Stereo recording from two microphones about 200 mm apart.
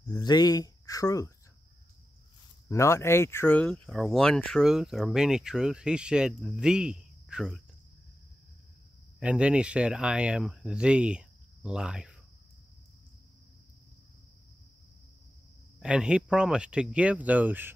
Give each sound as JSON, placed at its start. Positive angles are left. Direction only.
{"t": 0.1, "sound": "speech", "side_deg": 20}
{"t": 2.7, "sound": "speech", "side_deg": 15}
{"t": 9.2, "sound": "speech", "side_deg": -5}
{"t": 15.8, "sound": "speech", "side_deg": -5}